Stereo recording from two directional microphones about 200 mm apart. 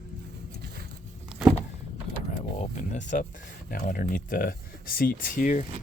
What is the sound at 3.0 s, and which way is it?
Speech, 40° left (ahead or behind).